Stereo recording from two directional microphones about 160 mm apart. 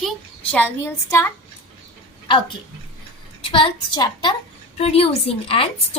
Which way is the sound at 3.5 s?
30° left (ahead or behind).